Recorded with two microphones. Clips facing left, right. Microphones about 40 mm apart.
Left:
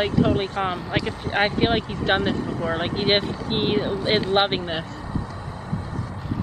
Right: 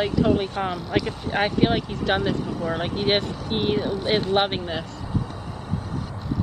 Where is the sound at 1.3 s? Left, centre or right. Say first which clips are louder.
Even; left.